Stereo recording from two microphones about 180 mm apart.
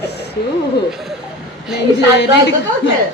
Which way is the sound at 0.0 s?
65° left (ahead or behind).